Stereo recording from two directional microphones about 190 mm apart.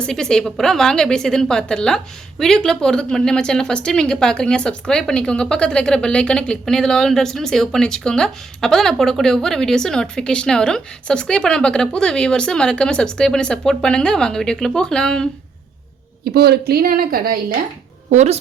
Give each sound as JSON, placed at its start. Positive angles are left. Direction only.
{"t": 0.0, "sound": "speech", "side_deg": 5}
{"t": 16.3, "sound": "a woman's voice", "side_deg": -55}
{"t": 18.1, "sound": "speech", "side_deg": -35}